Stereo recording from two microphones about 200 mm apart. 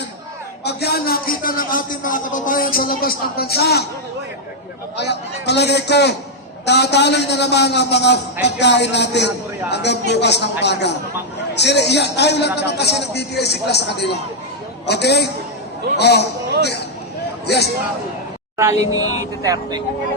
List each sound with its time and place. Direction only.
0.6 s a man's voice: 55° left (ahead or behind)
4.9 s a man's voice: 55° left (ahead or behind)
17.4 s a man's voice: 55° left (ahead or behind)
18.5 s speech: 15° right (ahead or behind)